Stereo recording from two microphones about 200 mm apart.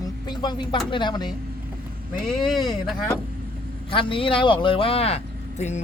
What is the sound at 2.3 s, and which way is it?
Speech, centre (ahead or behind).